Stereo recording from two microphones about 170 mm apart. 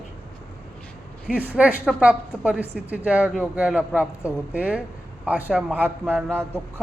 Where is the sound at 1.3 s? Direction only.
10° right (ahead or behind).